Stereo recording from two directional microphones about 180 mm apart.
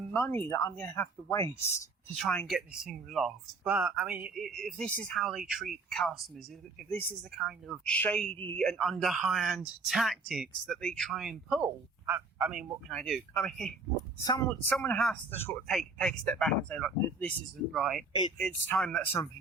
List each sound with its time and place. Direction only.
0.1 s speech: 10° left (ahead or behind)
2.2 s speech: 5° left (ahead or behind)
7.3 s a man's voice: centre (ahead or behind)
12.9 s speech: 5° left (ahead or behind)
14.3 s speech: 20° left (ahead or behind)
14.7 s speech: 10° left (ahead or behind)